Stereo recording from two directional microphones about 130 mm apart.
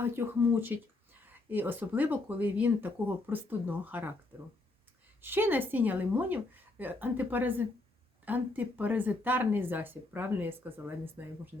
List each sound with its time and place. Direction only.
0.0 s speech: 15° right (ahead or behind)
5.2 s speech: 15° right (ahead or behind)